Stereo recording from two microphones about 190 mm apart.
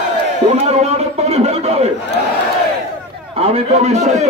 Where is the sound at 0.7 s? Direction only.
35° right (ahead or behind).